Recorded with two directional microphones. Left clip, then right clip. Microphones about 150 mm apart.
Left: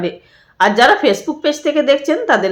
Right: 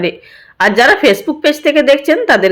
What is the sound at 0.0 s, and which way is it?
Speech, 20° right (ahead or behind).